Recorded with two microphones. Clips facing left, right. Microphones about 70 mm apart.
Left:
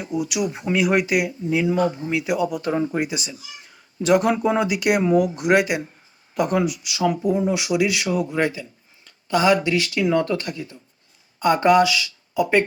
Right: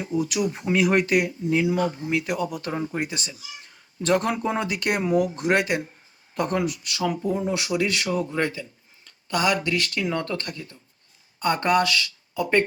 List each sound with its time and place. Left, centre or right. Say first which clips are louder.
0.0 s speech: left 1 dB; centre